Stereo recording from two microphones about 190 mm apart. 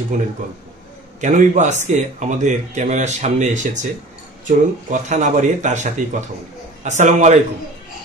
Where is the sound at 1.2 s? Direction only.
40° right (ahead or behind).